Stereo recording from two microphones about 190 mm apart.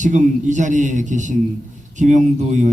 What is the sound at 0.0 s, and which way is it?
A man's voice, 40° right (ahead or behind).